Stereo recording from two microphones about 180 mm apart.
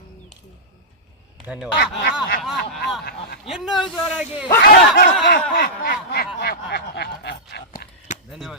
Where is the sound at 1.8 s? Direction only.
80° left.